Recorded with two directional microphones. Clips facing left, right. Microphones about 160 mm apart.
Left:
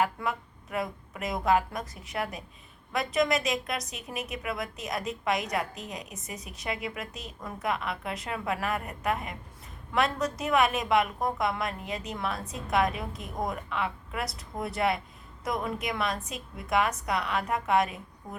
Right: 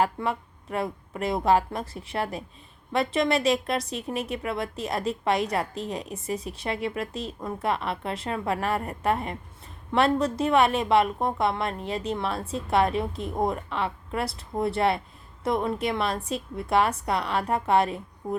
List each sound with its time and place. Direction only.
0.0 s a woman's voice: 30° right (ahead or behind)